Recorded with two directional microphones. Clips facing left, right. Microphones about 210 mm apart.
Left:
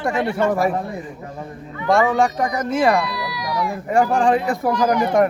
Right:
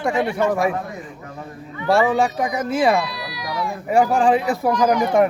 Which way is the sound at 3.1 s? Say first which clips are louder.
Left 3 dB; 25° right (ahead or behind).